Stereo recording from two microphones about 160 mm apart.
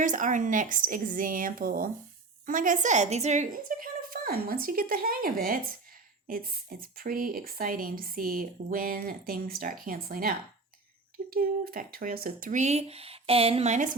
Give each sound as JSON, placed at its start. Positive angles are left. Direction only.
{"t": 0.0, "sound": "speech", "side_deg": -50}